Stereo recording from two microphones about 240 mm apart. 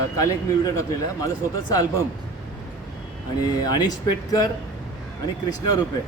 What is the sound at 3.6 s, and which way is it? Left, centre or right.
Speech, centre.